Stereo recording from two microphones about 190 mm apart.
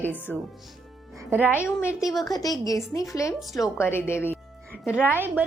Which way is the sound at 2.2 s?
20° left (ahead or behind).